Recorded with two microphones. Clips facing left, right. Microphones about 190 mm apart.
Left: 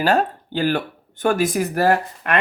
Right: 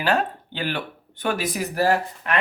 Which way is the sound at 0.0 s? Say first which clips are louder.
Left 4 dB; 40° left (ahead or behind).